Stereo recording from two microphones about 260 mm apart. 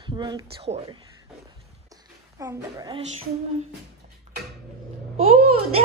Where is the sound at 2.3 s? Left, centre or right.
Centre.